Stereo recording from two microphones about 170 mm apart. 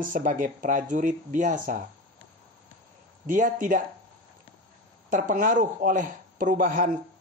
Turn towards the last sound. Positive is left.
turn(degrees=-55)  # may be behind; listen again after turning